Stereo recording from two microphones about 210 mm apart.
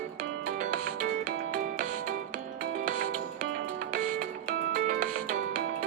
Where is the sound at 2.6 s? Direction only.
40° right (ahead or behind).